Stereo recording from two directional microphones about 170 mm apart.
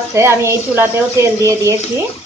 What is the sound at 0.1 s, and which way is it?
Speech, 15° right (ahead or behind).